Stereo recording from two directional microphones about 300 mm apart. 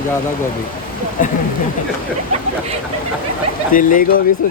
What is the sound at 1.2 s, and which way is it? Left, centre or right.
Speech, left.